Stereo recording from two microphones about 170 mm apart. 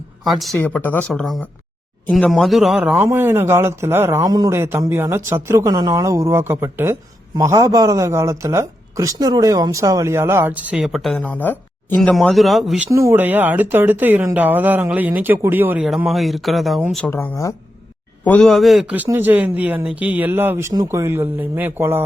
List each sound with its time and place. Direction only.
0.3 s speech: centre (ahead or behind)
0.6 s a man's voice: 10° left (ahead or behind)
12.9 s a man's voice: 15° right (ahead or behind); by 17.1 s centre (ahead or behind)
17.1 s speech: 15° left (ahead or behind)
18.3 s a man's voice: 5° left (ahead or behind); by 22.0 s 15° right (ahead or behind)